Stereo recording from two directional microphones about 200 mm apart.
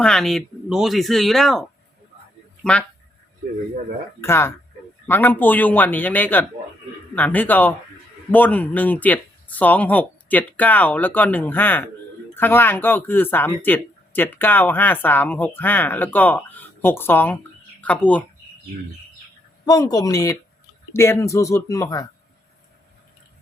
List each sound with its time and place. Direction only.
0.0 s speech: 5° left (ahead or behind)
4.2 s speech: 10° left (ahead or behind)
19.6 s speech: 20° left (ahead or behind)